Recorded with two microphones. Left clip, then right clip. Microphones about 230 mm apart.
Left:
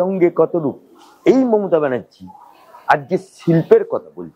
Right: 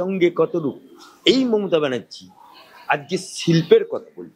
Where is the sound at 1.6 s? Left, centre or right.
Left.